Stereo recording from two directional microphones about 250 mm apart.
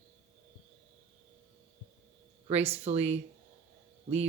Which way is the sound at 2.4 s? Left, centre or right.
Right.